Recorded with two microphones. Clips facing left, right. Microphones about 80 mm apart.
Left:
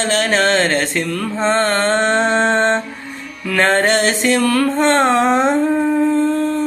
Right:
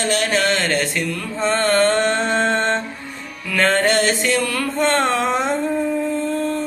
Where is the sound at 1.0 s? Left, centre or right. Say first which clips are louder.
Left 3 dB; left.